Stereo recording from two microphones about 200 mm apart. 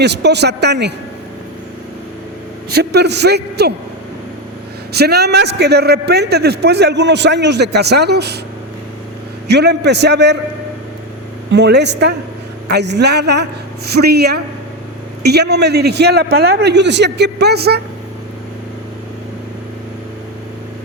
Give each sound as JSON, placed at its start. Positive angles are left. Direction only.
{"t": 0.0, "sound": "a man's voice", "side_deg": -60}
{"t": 2.7, "sound": "a man's voice", "side_deg": -55}
{"t": 4.9, "sound": "a man's voice", "side_deg": -55}
{"t": 9.5, "sound": "a man's voice", "side_deg": -55}
{"t": 11.5, "sound": "a man's voice", "side_deg": -60}